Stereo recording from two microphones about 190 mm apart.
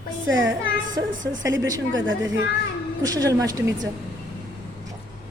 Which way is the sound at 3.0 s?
20° right (ahead or behind).